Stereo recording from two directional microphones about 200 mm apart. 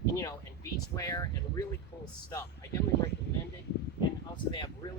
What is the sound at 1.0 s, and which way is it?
Speech, 20° left (ahead or behind).